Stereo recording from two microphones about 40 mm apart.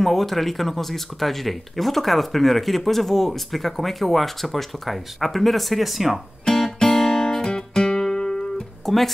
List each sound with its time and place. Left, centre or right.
0.0 s speech: centre
6.4 s music: centre
8.8 s music: centre